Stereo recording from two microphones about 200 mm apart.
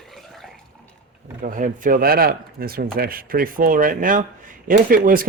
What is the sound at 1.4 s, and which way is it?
Speech, 40° right (ahead or behind).